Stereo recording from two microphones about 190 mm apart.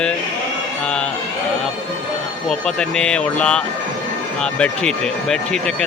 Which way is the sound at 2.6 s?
5° left (ahead or behind).